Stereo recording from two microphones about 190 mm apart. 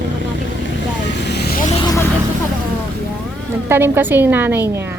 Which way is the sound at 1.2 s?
60° left (ahead or behind).